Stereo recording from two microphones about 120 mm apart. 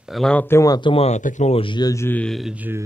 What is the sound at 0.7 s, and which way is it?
Speech, 40° left (ahead or behind).